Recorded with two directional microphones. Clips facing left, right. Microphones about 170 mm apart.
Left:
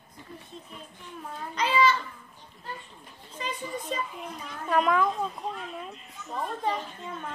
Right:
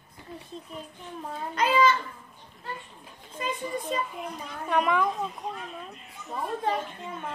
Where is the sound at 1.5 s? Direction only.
50° right (ahead or behind).